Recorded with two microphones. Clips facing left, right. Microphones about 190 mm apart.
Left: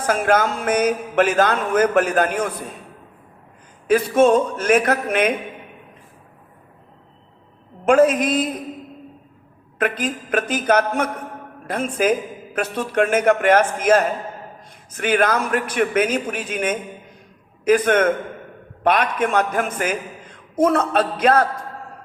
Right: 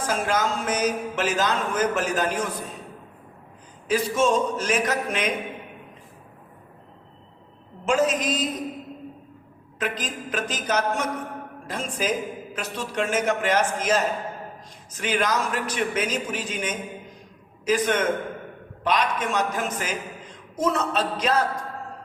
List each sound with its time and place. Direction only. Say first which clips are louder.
0.0 s speech: left 6 dB; 55° left (ahead or behind)
3.8 s speech: left 7 dB; 55° left (ahead or behind)
7.9 s speech: left 7 dB; 55° left (ahead or behind)
9.7 s speech: left 7 dB; 60° left (ahead or behind)